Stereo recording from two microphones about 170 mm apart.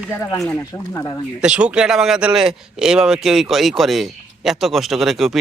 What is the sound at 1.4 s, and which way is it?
A man's voice, 5° right (ahead or behind).